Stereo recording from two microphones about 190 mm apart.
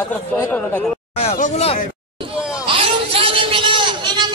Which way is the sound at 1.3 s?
40° left (ahead or behind).